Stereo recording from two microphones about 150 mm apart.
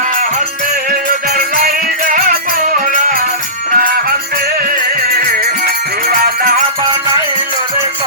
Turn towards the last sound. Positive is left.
turn(degrees=-80)